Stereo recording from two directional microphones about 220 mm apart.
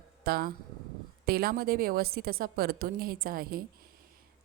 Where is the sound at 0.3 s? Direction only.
45° right (ahead or behind).